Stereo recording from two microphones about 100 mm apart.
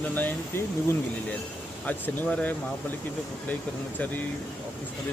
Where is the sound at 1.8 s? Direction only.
15° left (ahead or behind).